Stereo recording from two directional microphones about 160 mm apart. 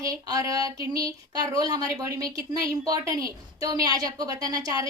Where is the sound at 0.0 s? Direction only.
20° right (ahead or behind).